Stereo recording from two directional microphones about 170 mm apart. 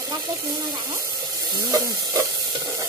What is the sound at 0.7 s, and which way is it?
Speech, 20° right (ahead or behind).